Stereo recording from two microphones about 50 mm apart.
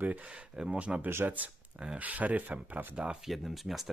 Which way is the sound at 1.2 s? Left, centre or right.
Right.